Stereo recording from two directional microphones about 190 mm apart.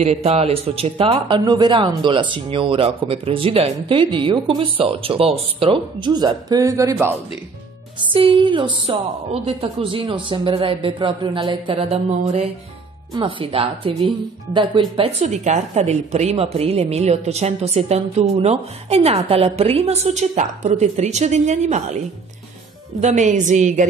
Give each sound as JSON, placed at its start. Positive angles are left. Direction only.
{"t": 0.0, "sound": "speech", "side_deg": -35}
{"t": 8.0, "sound": "speech", "side_deg": -25}